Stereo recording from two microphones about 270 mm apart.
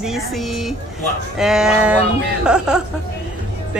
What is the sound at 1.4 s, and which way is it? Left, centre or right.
A woman's voice, centre.